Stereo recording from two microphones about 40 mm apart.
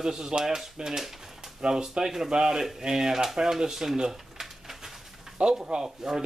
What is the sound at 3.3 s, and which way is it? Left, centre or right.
Pigeon, centre.